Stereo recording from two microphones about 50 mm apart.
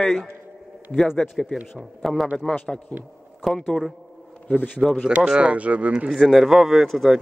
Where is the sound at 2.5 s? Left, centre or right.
Left.